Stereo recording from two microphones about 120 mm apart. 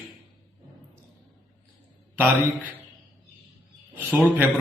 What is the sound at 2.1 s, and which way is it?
Speech, 15° right (ahead or behind).